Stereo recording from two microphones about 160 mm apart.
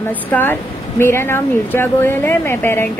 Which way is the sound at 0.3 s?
15° left (ahead or behind).